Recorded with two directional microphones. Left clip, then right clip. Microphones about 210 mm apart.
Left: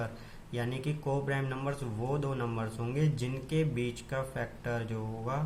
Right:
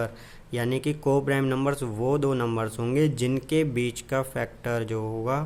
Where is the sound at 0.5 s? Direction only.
50° right (ahead or behind).